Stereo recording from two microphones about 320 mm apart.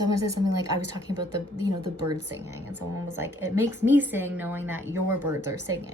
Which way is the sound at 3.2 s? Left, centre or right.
Centre.